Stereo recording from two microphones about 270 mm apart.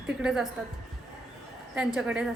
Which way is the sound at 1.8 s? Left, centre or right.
Centre.